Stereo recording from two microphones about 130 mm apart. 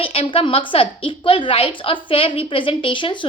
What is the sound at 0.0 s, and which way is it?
A woman's voice, 45° left (ahead or behind).